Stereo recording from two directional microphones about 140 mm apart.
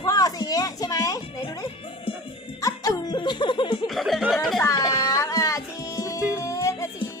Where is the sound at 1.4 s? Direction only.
35° left (ahead or behind).